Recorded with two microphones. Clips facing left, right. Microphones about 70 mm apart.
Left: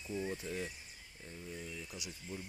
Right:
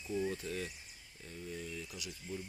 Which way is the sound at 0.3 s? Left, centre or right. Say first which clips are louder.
Right 1 dB; centre.